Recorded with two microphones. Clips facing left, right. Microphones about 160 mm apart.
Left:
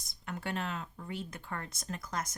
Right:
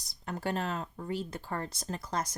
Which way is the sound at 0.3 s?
35° right (ahead or behind).